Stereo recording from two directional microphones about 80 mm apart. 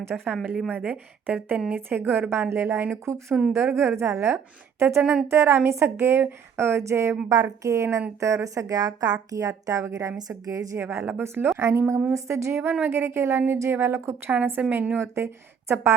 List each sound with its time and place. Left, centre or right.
0.1 s a woman's voice: centre
0.8 s a woman's voice: right
7.3 s speech: right
10.8 s a woman's voice: right
14.3 s a woman's voice: right